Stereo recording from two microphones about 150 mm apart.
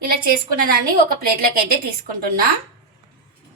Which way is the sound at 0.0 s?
80° right.